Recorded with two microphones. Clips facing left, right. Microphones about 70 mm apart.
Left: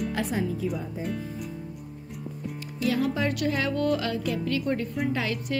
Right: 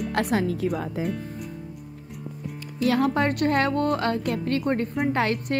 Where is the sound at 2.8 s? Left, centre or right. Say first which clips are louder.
Right 4 dB; right.